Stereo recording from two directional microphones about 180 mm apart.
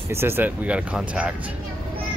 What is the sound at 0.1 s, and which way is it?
Speech, 15° right (ahead or behind).